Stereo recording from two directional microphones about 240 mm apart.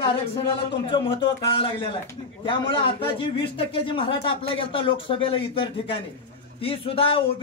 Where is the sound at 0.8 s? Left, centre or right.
Left.